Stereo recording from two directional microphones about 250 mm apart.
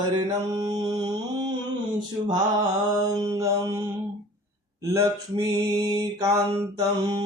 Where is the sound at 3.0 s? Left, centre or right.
Centre.